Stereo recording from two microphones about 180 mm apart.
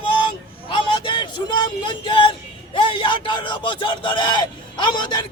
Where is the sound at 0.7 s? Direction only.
25° left (ahead or behind).